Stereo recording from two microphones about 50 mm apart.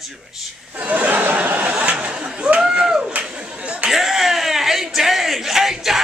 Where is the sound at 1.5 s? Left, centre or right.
Right.